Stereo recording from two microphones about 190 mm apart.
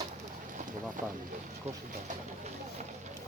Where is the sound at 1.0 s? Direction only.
45° right (ahead or behind).